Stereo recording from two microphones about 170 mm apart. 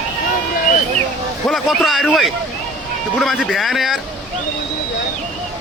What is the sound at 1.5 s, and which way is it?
A man's voice, centre (ahead or behind).